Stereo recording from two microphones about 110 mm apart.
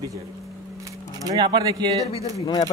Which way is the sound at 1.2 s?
40° right (ahead or behind).